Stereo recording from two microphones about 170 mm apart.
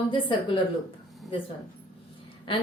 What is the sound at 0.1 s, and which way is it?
Speech, 30° left (ahead or behind).